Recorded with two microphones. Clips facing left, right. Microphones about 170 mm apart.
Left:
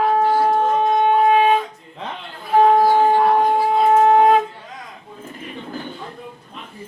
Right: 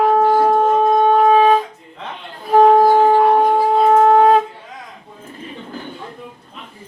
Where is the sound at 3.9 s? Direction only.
35° right (ahead or behind).